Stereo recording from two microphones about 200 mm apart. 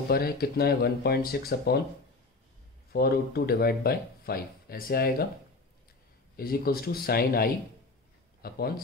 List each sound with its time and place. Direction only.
0.1 s speech: 50° left (ahead or behind)
2.9 s speech: 50° left (ahead or behind)
6.3 s speech: 50° left (ahead or behind)